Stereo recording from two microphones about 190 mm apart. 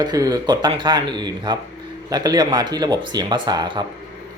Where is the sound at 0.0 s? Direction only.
20° right (ahead or behind).